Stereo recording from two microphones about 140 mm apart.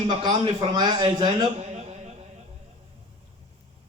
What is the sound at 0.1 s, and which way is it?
A man's voice, 30° right (ahead or behind).